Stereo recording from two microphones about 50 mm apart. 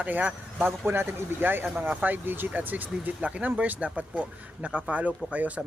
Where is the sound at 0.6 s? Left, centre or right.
Right.